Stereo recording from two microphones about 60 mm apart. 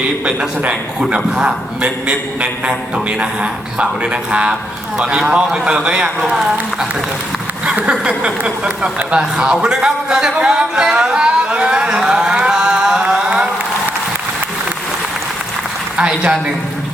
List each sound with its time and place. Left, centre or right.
0.3 s a man's voice: centre
7.6 s a man's voice: centre
16.0 s a man's voice: centre